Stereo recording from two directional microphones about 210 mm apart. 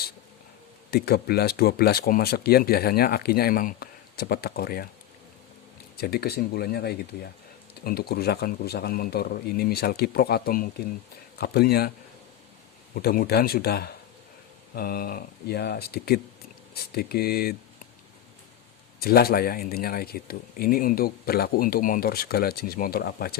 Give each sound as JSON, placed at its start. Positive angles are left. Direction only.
{"t": 0.9, "sound": "speech", "side_deg": 50}
{"t": 6.0, "sound": "speech", "side_deg": 50}
{"t": 12.9, "sound": "speech", "side_deg": 45}
{"t": 18.9, "sound": "speech", "side_deg": 45}